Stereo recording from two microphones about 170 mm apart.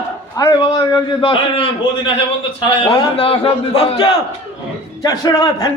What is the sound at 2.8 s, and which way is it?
A man's voice, 35° left (ahead or behind).